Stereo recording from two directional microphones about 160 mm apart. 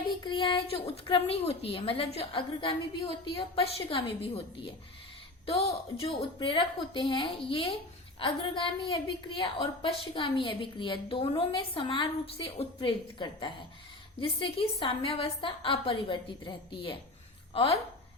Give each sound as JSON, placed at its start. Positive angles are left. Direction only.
{"t": 0.3, "sound": "a woman's voice", "side_deg": 30}
{"t": 5.5, "sound": "a woman's voice", "side_deg": 40}